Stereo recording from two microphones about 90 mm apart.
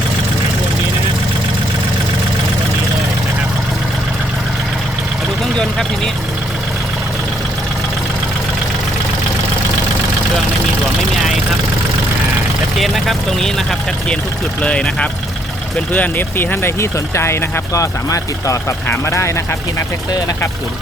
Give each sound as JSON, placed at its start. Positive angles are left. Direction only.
{"t": 12.8, "sound": "speech", "side_deg": 0}